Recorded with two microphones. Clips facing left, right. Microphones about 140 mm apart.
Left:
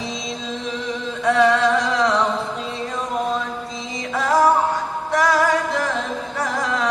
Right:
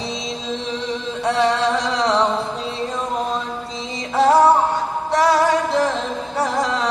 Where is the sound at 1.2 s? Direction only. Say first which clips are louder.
Left 2 dB; 30° right (ahead or behind).